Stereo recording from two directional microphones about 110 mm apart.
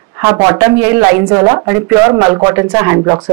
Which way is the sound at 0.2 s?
15° right (ahead or behind).